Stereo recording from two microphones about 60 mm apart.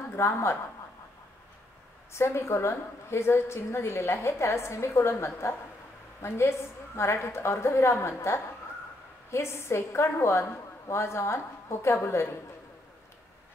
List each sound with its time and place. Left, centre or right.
0.1 s a woman's voice: left
2.1 s a woman's voice: left